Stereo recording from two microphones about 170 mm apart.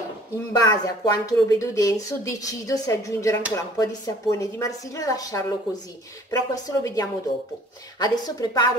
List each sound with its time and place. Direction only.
0.5 s speech: 20° left (ahead or behind)